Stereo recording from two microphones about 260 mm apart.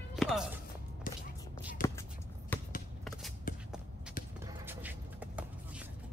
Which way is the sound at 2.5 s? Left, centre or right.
Centre.